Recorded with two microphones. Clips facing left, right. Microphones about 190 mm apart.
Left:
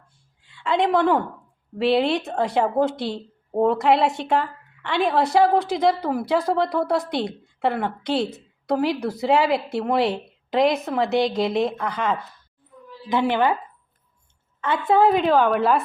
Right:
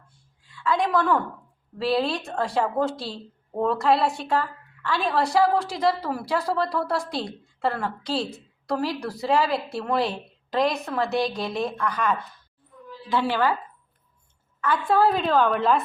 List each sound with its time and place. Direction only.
0.5 s a woman's voice: 25° left (ahead or behind)
14.6 s a woman's voice: 20° left (ahead or behind)